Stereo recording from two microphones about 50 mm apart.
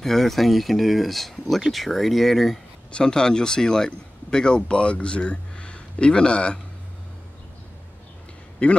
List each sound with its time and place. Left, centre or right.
0.0 s speech: centre
2.9 s speech: centre
8.6 s a man's voice: left